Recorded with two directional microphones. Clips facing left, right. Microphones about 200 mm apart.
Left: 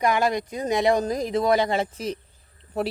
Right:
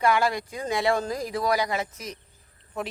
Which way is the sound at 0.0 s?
20° left (ahead or behind).